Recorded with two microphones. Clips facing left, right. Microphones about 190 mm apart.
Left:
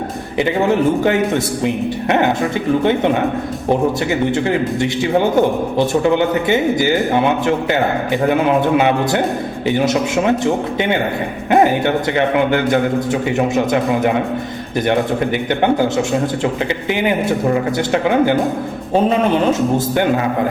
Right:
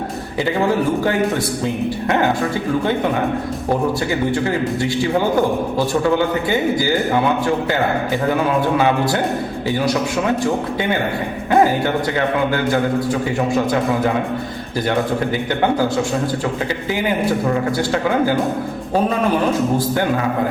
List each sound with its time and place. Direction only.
0.3 s a man's voice: 20° left (ahead or behind)
5.4 s a man's voice: 20° left (ahead or behind)
12.1 s a man's voice: 20° left (ahead or behind)
17.7 s a man's voice: 20° left (ahead or behind)